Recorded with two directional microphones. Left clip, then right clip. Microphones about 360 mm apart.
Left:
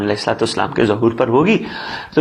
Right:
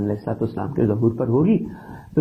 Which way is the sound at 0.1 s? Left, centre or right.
Centre.